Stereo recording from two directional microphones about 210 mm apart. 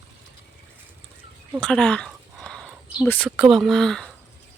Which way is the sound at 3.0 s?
10° left (ahead or behind).